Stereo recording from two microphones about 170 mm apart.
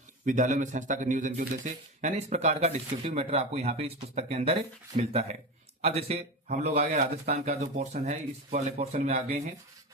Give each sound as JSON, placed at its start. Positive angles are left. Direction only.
{"t": 0.3, "sound": "speech", "side_deg": -50}